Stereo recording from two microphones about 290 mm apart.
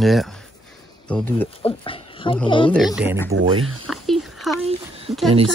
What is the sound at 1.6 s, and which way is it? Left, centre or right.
Speech, centre.